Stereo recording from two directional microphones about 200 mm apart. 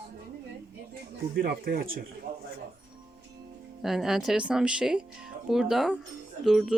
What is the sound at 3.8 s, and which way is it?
Speech, centre (ahead or behind).